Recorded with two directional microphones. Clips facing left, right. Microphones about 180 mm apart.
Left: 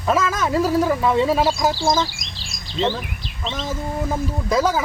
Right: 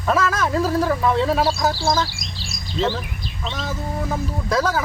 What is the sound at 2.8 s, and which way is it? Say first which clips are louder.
Speech: left 1 dB; centre (ahead or behind).